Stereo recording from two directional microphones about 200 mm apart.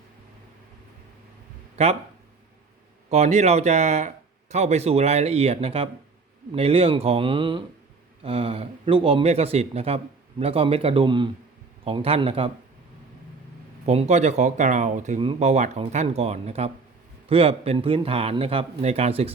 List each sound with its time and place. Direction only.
3.1 s speech: 35° right (ahead or behind)
13.8 s speech: 35° right (ahead or behind)